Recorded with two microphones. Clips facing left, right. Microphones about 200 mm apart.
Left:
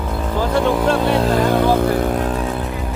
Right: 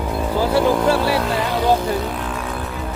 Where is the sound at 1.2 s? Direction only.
45° left (ahead or behind).